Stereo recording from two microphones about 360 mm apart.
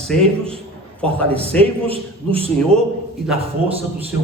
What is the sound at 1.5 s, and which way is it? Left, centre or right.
Speech, centre.